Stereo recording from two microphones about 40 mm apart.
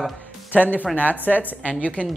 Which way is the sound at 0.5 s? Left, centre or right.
Left.